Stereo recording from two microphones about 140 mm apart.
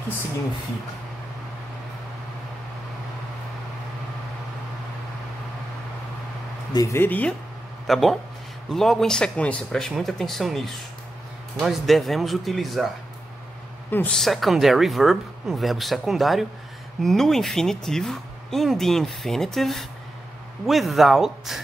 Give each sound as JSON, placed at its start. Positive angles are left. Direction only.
{"t": 6.7, "sound": "speech", "side_deg": 25}
{"t": 7.0, "sound": "speech", "side_deg": 10}
{"t": 13.8, "sound": "a woman's voice", "side_deg": 15}
{"t": 14.1, "sound": "speech", "side_deg": 0}